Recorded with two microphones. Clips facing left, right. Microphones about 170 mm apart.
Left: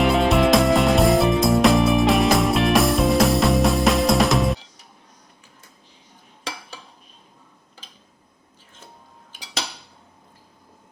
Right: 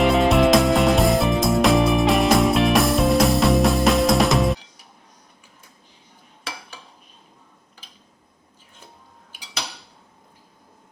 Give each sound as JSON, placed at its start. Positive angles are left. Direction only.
{"t": 0.0, "sound": "music", "side_deg": 0}